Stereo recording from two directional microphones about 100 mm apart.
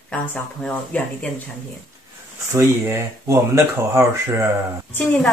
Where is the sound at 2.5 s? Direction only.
25° right (ahead or behind).